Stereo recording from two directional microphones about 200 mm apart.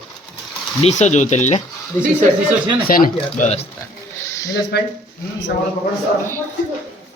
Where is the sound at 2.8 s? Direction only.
45° left (ahead or behind).